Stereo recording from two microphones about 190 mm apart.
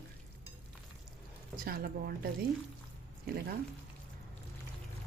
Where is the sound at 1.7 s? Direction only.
55° right (ahead or behind).